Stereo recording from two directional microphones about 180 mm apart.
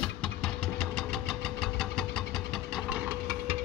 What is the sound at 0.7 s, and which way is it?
Engine, 5° left (ahead or behind).